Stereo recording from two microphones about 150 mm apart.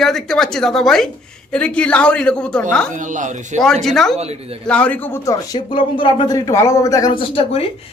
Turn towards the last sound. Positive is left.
turn(degrees=40)  # may be behind; listen again after turning